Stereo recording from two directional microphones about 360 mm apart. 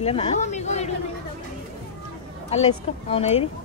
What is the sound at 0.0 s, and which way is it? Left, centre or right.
Speech, centre.